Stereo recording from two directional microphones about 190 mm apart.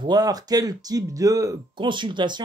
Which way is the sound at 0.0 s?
20° right (ahead or behind).